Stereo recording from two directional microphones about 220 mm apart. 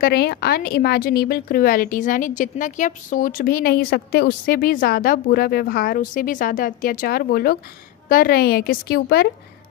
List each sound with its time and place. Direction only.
0.0 s a woman's voice: 45° left (ahead or behind)